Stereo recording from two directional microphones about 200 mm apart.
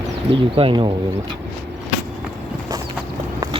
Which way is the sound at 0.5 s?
25° right (ahead or behind).